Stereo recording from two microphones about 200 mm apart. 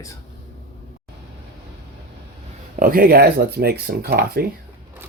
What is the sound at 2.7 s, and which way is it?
Speech, 45° right (ahead or behind).